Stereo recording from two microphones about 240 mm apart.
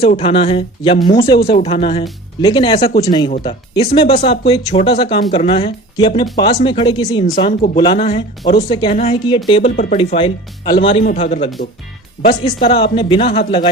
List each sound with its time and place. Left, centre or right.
0.0 s a woman's voice: left
7.3 s a woman's voice: left
12.5 s a woman's voice: left